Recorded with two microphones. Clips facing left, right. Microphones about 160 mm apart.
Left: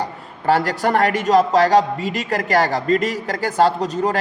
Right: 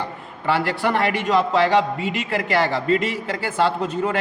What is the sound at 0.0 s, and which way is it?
A man's voice, 40° left (ahead or behind).